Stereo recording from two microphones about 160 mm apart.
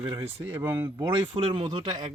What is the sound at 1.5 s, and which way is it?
Speech, 30° right (ahead or behind).